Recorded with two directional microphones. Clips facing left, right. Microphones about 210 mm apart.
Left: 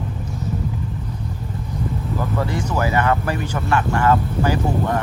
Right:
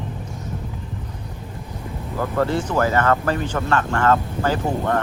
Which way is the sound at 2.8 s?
15° left (ahead or behind).